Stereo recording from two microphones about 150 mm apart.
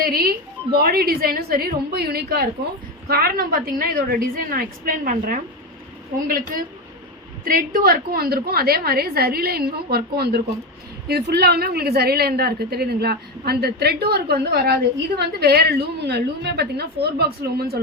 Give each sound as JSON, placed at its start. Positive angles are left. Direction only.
{"t": 0.0, "sound": "a woman's voice", "side_deg": -90}